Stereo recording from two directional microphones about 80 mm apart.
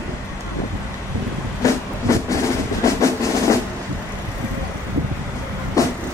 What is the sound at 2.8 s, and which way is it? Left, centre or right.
Percussion, left.